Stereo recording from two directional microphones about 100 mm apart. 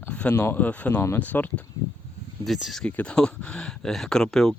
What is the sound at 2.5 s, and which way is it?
Speech, centre (ahead or behind).